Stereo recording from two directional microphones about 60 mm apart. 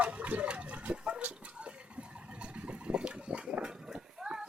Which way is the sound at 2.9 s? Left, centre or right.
Centre.